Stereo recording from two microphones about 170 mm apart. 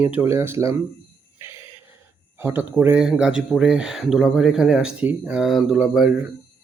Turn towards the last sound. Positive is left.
turn(degrees=-5)  # may be behind; listen again after turning